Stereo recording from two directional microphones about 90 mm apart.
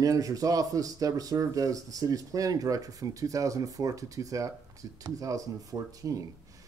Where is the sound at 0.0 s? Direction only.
40° right (ahead or behind).